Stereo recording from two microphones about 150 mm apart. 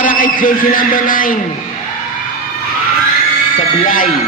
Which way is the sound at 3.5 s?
65° left (ahead or behind).